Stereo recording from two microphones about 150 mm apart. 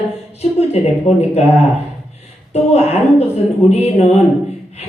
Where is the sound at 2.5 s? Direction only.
45° left (ahead or behind).